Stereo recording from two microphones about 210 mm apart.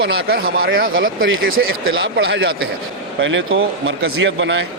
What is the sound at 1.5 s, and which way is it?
Speech, 70° right (ahead or behind).